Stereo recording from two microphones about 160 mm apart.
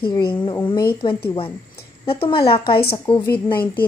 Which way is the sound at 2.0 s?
35° left (ahead or behind).